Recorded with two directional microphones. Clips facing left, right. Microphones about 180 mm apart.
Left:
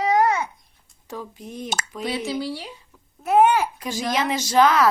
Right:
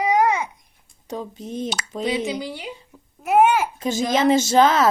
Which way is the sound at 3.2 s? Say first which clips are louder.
Even; 10° right (ahead or behind).